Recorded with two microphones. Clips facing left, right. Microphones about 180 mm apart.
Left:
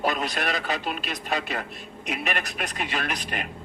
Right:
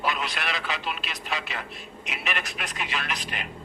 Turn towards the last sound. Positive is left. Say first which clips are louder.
# left 3 dB
turn(degrees=50)  # may be behind; listen again after turning